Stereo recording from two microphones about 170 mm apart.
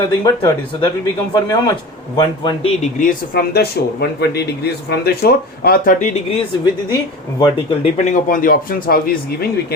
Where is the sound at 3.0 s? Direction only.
60° left (ahead or behind).